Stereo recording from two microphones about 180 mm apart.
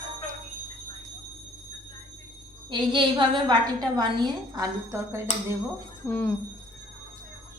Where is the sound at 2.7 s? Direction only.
25° right (ahead or behind).